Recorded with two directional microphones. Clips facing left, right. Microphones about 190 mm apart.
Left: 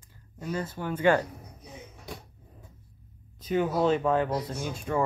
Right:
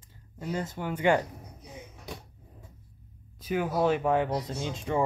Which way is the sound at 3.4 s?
10° right (ahead or behind).